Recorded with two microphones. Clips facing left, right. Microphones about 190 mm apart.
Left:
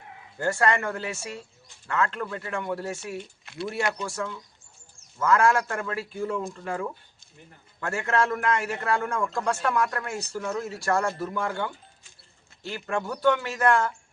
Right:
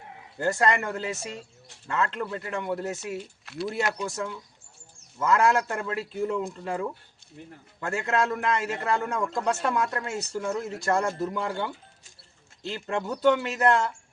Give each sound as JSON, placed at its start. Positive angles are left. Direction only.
{"t": 0.3, "sound": "a man's voice", "side_deg": -15}
{"t": 3.2, "sound": "speech", "side_deg": 0}
{"t": 4.0, "sound": "a man's voice", "side_deg": -20}